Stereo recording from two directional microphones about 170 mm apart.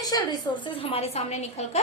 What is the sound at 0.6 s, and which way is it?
A woman's voice, 35° left (ahead or behind).